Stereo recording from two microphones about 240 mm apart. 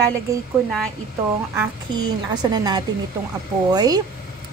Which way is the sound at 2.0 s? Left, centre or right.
Centre.